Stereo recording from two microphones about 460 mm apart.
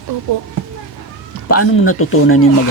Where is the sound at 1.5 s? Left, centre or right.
Left.